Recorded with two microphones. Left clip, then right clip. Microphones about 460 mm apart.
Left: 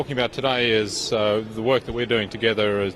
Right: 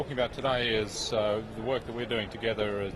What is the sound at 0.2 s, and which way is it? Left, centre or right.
A man's voice, left.